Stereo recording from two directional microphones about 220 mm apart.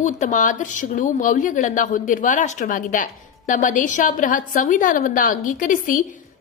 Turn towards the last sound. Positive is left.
turn(degrees=35)  # may be behind; listen again after turning